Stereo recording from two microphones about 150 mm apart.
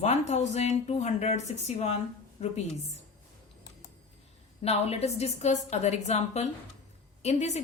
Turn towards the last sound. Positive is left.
turn(degrees=50)  # may be behind; listen again after turning